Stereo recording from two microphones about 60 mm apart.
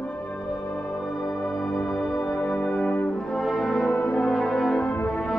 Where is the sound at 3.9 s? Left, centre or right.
Centre.